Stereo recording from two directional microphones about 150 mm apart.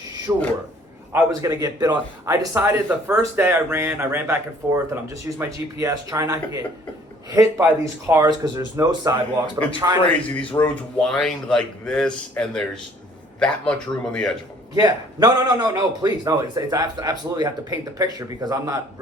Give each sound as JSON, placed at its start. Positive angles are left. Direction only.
{"t": 0.3, "sound": "a man's voice", "side_deg": -20}
{"t": 10.1, "sound": "speech", "side_deg": 10}
{"t": 14.8, "sound": "a man's voice", "side_deg": -25}